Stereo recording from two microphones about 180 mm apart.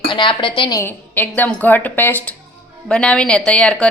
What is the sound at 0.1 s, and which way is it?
Speech, 25° left (ahead or behind).